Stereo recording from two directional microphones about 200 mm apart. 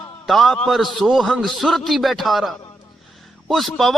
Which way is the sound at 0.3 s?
Centre (ahead or behind).